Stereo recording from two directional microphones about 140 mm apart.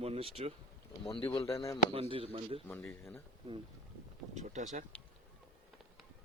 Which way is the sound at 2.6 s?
10° left (ahead or behind).